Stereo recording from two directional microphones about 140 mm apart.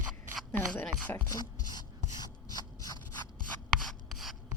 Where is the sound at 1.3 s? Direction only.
30° left (ahead or behind).